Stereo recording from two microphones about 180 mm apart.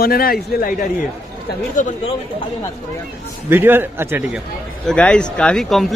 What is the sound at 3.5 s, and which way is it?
Speech, 10° right (ahead or behind).